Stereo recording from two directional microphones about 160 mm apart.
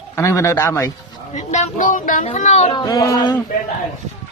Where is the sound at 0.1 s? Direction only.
20° left (ahead or behind).